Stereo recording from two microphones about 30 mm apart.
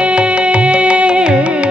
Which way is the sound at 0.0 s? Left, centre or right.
Right.